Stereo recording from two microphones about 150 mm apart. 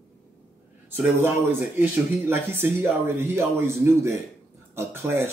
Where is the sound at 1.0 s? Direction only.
10° right (ahead or behind).